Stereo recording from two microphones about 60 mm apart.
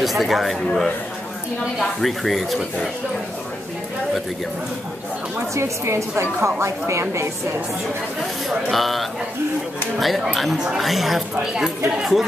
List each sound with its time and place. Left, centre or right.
0.0 s a woman's voice: centre
1.8 s a woman's voice: centre
5.5 s a woman's voice: right
8.5 s a woman's voice: centre